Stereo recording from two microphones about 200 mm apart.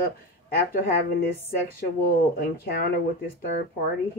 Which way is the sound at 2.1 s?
50° left (ahead or behind).